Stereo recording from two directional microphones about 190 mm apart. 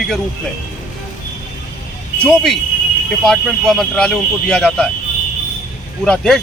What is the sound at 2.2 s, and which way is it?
Speech, centre (ahead or behind).